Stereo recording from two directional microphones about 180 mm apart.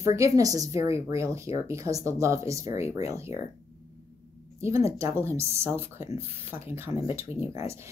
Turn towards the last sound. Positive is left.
turn(degrees=-15)  # may be behind; listen again after turning